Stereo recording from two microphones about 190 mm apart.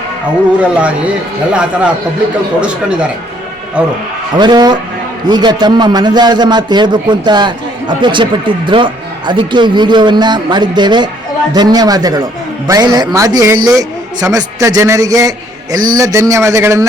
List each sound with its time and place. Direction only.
0.6 s a man's voice: 5° right (ahead or behind)
2.6 s a man's voice: 5° right (ahead or behind)
4.4 s a man's voice: 20° right (ahead or behind)